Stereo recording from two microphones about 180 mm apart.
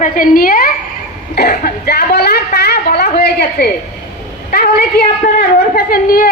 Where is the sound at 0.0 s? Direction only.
50° left (ahead or behind).